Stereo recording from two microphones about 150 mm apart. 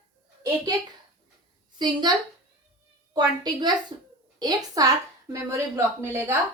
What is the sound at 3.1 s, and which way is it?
A woman's voice, 30° right (ahead or behind).